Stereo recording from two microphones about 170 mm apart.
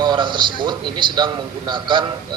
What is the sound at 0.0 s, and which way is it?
A man's voice, 25° right (ahead or behind).